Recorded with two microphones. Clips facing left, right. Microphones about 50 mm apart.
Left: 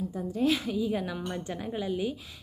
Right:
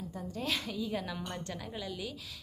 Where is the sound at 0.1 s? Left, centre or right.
Centre.